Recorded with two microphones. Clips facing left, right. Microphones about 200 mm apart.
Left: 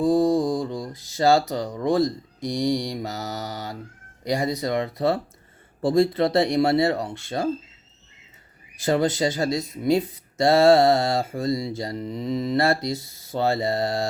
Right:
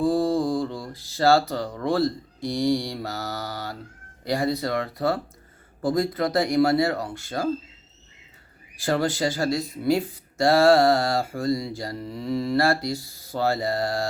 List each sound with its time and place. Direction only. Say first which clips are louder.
0.0 s speech: left 2 dB; 20° left (ahead or behind)
8.8 s speech: left 2 dB; 20° left (ahead or behind)